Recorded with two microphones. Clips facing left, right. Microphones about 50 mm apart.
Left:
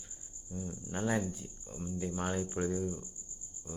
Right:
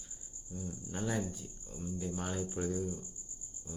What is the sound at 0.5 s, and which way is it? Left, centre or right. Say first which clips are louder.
Speech: left 2 dB; centre.